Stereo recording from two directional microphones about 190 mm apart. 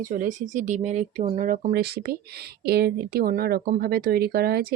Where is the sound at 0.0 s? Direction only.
45° right (ahead or behind).